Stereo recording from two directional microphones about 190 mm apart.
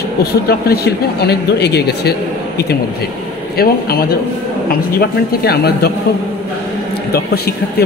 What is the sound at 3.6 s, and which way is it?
Speech, 55° left (ahead or behind).